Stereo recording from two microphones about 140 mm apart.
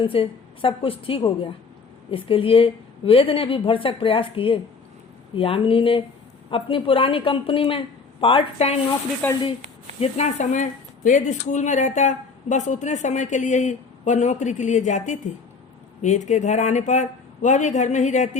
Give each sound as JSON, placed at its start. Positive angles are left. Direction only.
{"t": 0.1, "sound": "a woman's voice", "side_deg": 40}
{"t": 9.2, "sound": "speech", "side_deg": 10}
{"t": 10.0, "sound": "speech", "side_deg": 55}